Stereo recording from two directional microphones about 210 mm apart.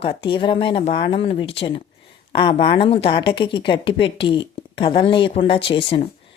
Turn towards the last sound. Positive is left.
turn(degrees=25)  # may be behind; listen again after turning